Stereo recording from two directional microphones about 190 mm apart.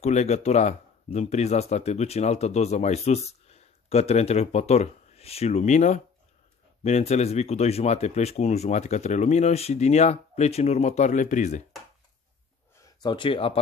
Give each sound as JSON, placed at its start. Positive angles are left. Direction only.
{"t": 0.0, "sound": "speech", "side_deg": 35}
{"t": 13.0, "sound": "speech", "side_deg": 25}